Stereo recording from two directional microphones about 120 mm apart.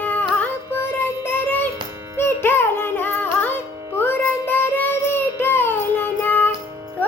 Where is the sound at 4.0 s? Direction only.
15° left (ahead or behind).